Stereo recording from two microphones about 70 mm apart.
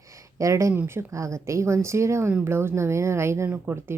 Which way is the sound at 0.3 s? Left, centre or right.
Right.